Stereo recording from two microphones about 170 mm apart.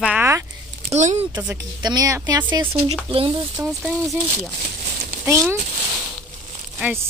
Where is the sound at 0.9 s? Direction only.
40° right (ahead or behind).